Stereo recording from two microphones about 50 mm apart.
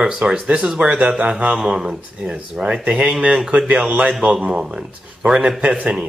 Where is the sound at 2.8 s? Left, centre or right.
Right.